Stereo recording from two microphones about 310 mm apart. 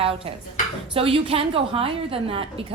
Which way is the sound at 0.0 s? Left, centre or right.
Centre.